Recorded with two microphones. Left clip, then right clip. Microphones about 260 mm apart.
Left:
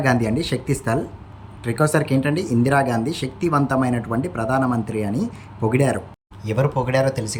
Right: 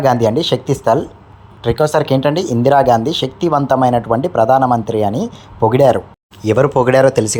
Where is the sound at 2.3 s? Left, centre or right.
Centre.